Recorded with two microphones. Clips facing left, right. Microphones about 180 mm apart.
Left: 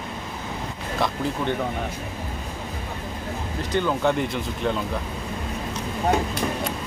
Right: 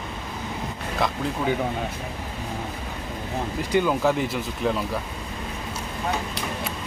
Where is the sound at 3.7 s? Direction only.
5° right (ahead or behind).